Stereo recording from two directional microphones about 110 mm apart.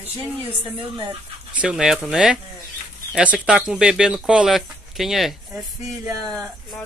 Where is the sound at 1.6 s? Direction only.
10° right (ahead or behind).